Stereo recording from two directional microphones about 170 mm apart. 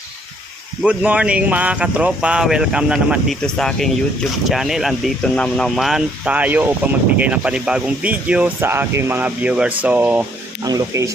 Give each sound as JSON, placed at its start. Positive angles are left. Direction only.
{"t": 0.8, "sound": "speech", "side_deg": -5}
{"t": 10.6, "sound": "speech", "side_deg": -20}